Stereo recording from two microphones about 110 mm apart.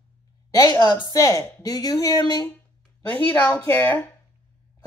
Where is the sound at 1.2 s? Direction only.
30° left (ahead or behind).